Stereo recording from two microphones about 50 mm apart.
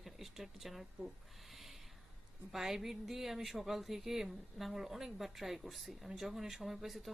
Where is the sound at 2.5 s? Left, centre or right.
Centre.